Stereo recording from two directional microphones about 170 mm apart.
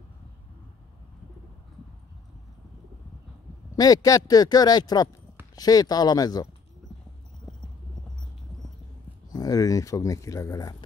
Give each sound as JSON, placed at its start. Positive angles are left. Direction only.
{"t": 3.7, "sound": "speech", "side_deg": 20}
{"t": 9.3, "sound": "speech", "side_deg": 20}